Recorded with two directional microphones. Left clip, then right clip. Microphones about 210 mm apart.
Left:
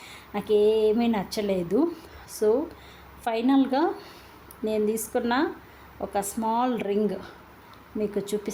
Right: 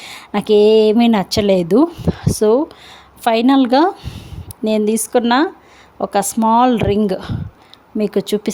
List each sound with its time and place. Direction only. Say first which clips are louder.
0.0 s speech: right 12 dB; 45° right (ahead or behind)